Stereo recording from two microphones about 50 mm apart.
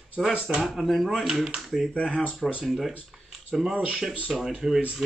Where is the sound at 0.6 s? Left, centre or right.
Centre.